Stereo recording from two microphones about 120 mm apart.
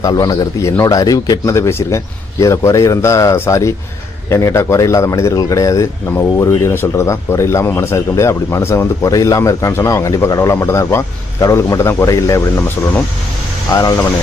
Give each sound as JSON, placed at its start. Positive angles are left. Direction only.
{"t": 0.0, "sound": "speech", "side_deg": 35}